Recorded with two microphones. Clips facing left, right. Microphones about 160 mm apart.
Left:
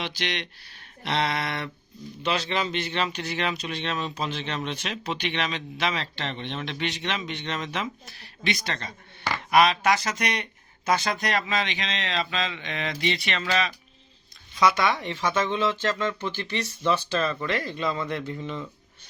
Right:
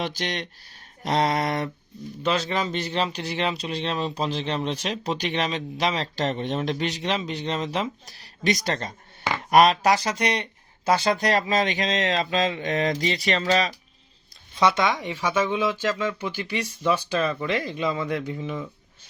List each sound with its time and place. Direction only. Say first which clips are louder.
0.0 s speech: right 3 dB; 40° right (ahead or behind)
14.6 s speech: right 1 dB; 25° right (ahead or behind)